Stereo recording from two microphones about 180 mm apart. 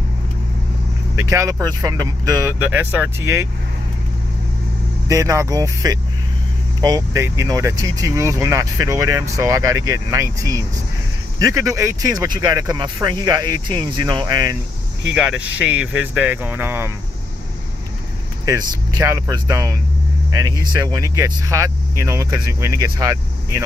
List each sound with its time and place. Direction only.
1.3 s speech: 15° right (ahead or behind)
5.0 s speech: 20° right (ahead or behind)
15.1 s speech: 5° right (ahead or behind)
18.4 s speech: 20° right (ahead or behind)